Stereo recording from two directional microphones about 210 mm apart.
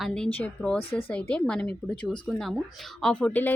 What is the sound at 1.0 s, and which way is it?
A woman's voice, 5° left (ahead or behind).